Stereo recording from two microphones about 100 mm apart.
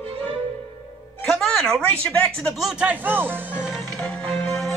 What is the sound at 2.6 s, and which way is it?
Speech, 10° right (ahead or behind).